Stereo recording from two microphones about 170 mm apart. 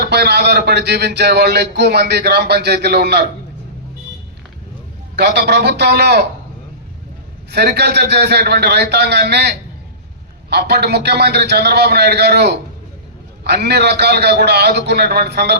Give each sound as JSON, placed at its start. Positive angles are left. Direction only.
{"t": 0.0, "sound": "speech", "side_deg": -75}
{"t": 5.1, "sound": "speech", "side_deg": -80}
{"t": 7.5, "sound": "speech", "side_deg": -75}